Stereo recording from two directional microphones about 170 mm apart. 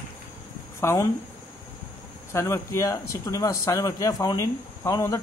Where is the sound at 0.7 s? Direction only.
15° left (ahead or behind).